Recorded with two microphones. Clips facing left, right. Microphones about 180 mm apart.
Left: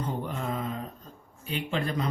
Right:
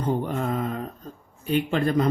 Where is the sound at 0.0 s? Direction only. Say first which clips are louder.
Right 7 dB; 50° right (ahead or behind).